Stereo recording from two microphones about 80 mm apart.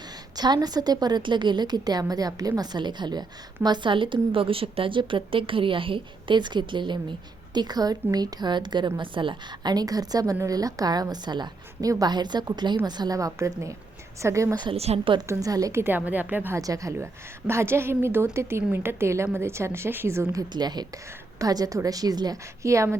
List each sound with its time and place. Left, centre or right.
0.3 s a woman's voice: right
2.7 s a woman's voice: right
7.5 s a woman's voice: right
11.1 s a woman's voice: right
14.5 s a woman's voice: right
15.3 s a woman's voice: right
15.7 s a woman's voice: right
16.6 s a woman's voice: right
17.0 s a woman's voice: right
20.5 s a woman's voice: right
21.3 s a woman's voice: right
22.6 s a woman's voice: right